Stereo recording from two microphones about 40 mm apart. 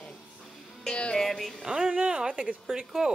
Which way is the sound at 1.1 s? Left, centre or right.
Centre.